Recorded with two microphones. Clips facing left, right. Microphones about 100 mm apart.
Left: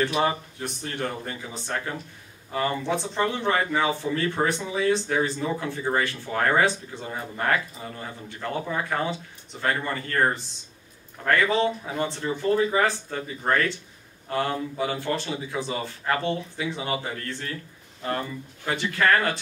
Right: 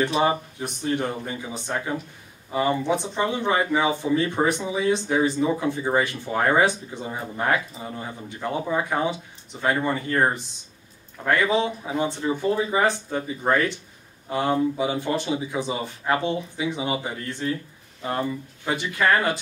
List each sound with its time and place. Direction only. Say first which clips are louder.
0.0 s speech: right 2 dB; 20° right (ahead or behind)
18.7 s speech: right 1 dB; 15° right (ahead or behind)